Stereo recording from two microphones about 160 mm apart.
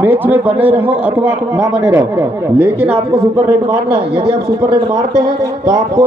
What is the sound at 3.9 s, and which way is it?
Speech, 35° right (ahead or behind).